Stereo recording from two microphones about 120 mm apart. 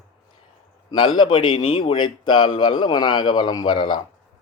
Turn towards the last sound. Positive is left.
turn(degrees=40)  # may be behind; listen again after turning